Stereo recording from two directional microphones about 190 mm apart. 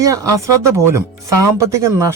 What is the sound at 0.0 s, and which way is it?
Speech, 15° right (ahead or behind).